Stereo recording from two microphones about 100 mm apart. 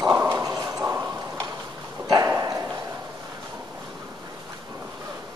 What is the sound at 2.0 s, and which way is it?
Dog, 30° right (ahead or behind).